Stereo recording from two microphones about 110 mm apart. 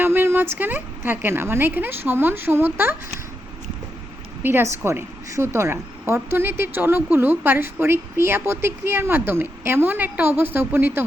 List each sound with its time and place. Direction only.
0.0 s a woman's voice: 20° right (ahead or behind)
4.4 s a woman's voice: 20° right (ahead or behind)